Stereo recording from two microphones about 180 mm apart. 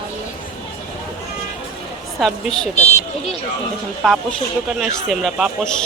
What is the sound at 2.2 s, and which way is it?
Speech, centre (ahead or behind).